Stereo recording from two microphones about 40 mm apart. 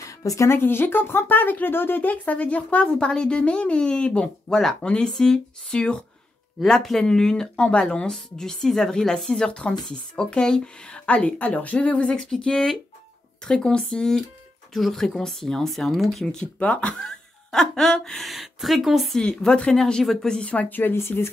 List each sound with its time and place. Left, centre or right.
0.5 s speech: left
2.0 s a woman's voice: left
3.1 s a woman's voice: left
6.6 s speech: centre
7.0 s a woman's voice: centre
11.1 s a woman's voice: left
11.9 s a woman's voice: left
14.7 s speech: centre
16.6 s a woman's voice: left
17.0 s music: centre
18.2 s speech: centre
19.1 s a woman's voice: centre
20.9 s speech: left